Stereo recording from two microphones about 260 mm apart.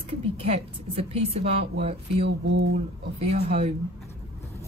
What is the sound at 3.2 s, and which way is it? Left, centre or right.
Speech, right.